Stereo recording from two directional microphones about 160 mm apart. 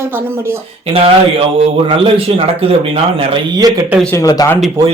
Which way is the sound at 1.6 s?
35° right (ahead or behind).